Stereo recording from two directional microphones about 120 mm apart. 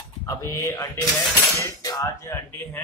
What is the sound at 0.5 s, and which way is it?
Speech, 30° left (ahead or behind).